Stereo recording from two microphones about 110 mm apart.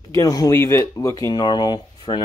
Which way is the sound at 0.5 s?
25° left (ahead or behind).